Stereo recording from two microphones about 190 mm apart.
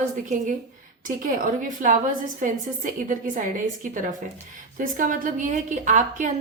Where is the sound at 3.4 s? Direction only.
45° right (ahead or behind).